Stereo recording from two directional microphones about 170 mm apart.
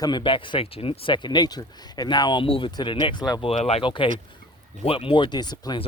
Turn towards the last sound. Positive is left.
turn(degrees=25)  # may be behind; listen again after turning